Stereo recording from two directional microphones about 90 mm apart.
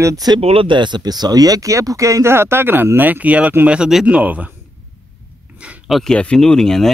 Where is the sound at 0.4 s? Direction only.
90° right; by 4.6 s 15° right (ahead or behind).